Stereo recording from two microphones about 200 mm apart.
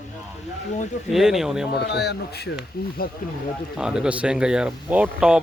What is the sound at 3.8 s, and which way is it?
Speech, 5° right (ahead or behind).